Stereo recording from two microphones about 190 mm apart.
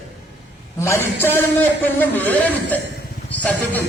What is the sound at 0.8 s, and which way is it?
A man's voice, 15° left (ahead or behind).